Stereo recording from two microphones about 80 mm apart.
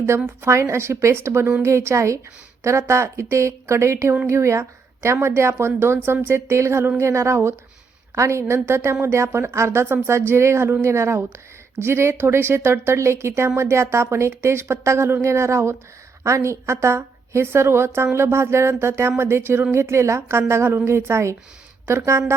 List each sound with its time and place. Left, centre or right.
0.3 s a woman's voice: right